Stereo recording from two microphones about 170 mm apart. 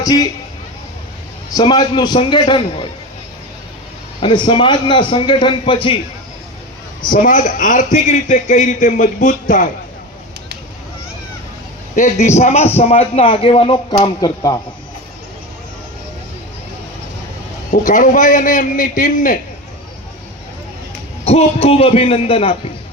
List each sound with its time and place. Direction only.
0.0 s a man's voice: 20° left (ahead or behind)
1.5 s a man's voice: 25° left (ahead or behind)
4.2 s a man's voice: 30° left (ahead or behind)
7.1 s a man's voice: 50° left (ahead or behind)
11.9 s a man's voice: 45° left (ahead or behind); by 14.6 s 20° left (ahead or behind)
17.7 s a man's voice: 50° left (ahead or behind)
21.2 s a man's voice: 35° left (ahead or behind)